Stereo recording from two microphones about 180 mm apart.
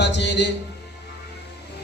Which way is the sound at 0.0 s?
70° left (ahead or behind).